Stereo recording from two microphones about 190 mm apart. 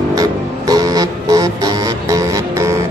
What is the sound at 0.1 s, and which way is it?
Music, 20° right (ahead or behind).